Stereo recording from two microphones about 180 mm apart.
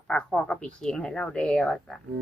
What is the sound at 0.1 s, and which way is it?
Speech, 5° left (ahead or behind).